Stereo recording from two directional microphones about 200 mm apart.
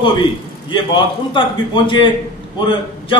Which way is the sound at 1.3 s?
25° left (ahead or behind).